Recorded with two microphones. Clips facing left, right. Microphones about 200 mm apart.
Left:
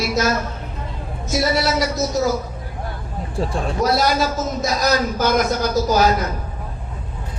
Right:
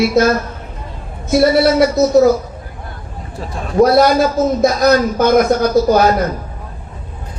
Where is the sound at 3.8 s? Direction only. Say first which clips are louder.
Right 9 dB; 55° right (ahead or behind).